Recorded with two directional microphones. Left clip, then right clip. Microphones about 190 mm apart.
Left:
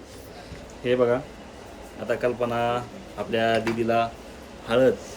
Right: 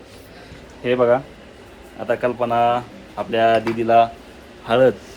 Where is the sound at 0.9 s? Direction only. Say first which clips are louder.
Right 5 dB; 15° right (ahead or behind).